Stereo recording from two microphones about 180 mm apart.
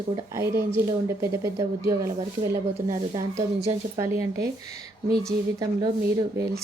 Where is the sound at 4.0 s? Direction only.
15° right (ahead or behind).